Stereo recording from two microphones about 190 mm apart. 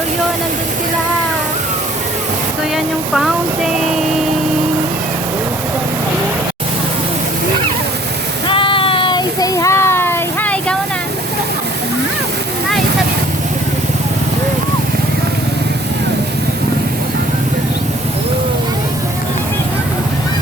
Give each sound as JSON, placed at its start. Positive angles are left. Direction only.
{"t": 2.7, "sound": "speech", "side_deg": 0}
{"t": 8.4, "sound": "child singing", "side_deg": 25}